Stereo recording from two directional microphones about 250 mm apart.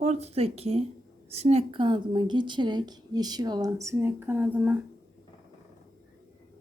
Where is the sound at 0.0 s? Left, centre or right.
Right; by 4.8 s centre.